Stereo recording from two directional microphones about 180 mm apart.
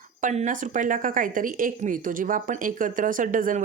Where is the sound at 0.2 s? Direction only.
45° right (ahead or behind).